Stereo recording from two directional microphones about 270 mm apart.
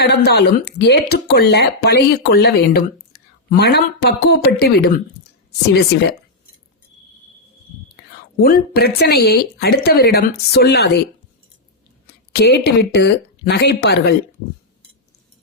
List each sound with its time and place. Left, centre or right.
0.0 s speech: left
8.4 s speech: left
12.0 s speech: left